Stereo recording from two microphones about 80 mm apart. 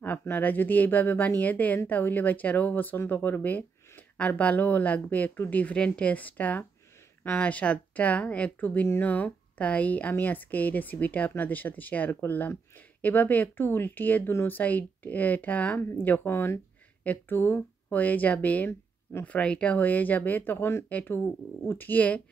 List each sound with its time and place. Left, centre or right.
0.0 s speech: left